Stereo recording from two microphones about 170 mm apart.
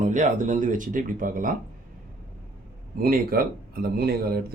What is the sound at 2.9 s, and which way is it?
Speech, 60° right (ahead or behind).